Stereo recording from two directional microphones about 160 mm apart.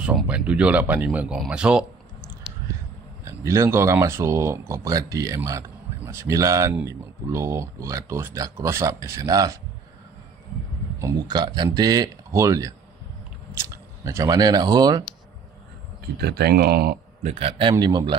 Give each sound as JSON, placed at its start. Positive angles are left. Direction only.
{"t": 0.0, "sound": "speech", "side_deg": -5}
{"t": 3.3, "sound": "speech", "side_deg": -20}
{"t": 11.0, "sound": "speech", "side_deg": -25}
{"t": 16.2, "sound": "speech", "side_deg": -90}
{"t": 17.2, "sound": "a man's voice", "side_deg": -40}